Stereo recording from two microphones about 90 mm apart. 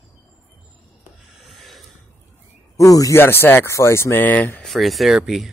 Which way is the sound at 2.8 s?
40° left (ahead or behind).